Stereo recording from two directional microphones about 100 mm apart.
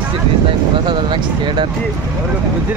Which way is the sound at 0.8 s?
50° right (ahead or behind).